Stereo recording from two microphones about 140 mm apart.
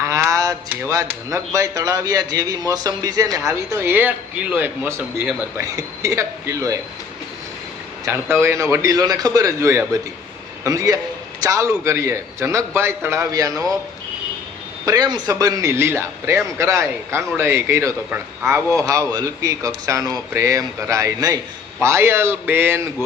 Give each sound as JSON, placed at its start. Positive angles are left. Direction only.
{"t": 0.1, "sound": "speech", "side_deg": -20}
{"t": 8.0, "sound": "a man's voice", "side_deg": -20}
{"t": 14.8, "sound": "speech", "side_deg": -30}